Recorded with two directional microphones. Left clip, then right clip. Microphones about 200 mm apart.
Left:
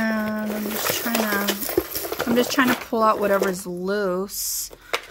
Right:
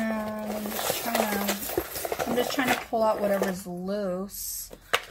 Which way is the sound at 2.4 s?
55° left (ahead or behind).